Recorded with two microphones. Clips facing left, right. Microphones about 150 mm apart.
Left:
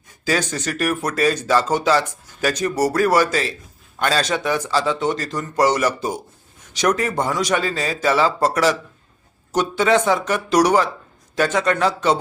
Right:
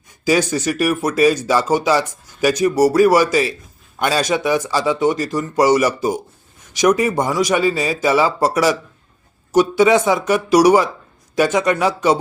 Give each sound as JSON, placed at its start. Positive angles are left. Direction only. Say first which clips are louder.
{"t": 0.3, "sound": "speech", "louder": "right 5 dB", "side_deg": -10}